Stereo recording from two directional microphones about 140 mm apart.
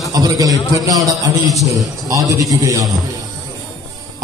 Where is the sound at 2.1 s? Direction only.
25° right (ahead or behind).